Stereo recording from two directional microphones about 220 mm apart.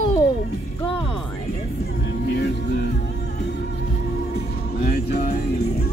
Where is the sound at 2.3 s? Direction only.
50° left (ahead or behind).